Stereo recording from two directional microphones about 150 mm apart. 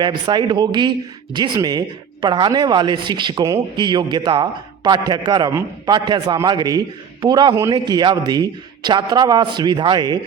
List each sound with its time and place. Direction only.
0.0 s speech: 30° right (ahead or behind)